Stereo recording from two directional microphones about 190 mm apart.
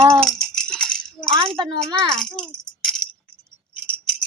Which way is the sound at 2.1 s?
5° left (ahead or behind).